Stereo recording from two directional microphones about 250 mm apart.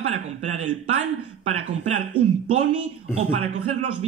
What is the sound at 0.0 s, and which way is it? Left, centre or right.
Speech, right.